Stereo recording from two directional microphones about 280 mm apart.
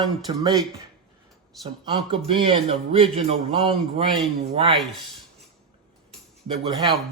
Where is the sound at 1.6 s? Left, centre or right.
Centre.